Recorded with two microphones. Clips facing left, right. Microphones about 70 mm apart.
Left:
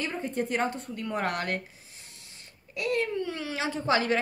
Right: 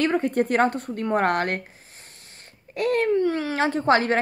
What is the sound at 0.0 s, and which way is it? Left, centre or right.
A woman's voice, right.